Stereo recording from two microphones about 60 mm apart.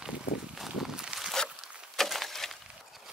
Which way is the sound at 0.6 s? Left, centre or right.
Centre.